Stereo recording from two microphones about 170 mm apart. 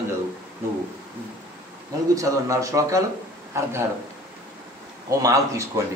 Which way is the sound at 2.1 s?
20° right (ahead or behind).